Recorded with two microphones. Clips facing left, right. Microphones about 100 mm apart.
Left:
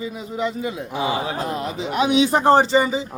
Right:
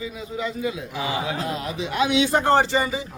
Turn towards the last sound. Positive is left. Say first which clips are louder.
# left 4 dB
turn(degrees=25)  # may be behind; listen again after turning